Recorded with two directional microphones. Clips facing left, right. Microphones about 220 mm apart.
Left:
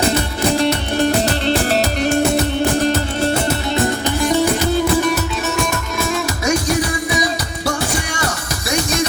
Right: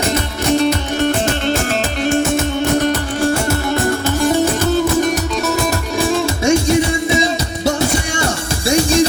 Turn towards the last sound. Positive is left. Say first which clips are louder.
# right 4 dB
turn(degrees=-25)  # may be behind; listen again after turning